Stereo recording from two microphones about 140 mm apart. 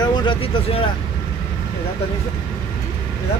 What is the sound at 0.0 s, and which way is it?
Vehicle, 30° left (ahead or behind).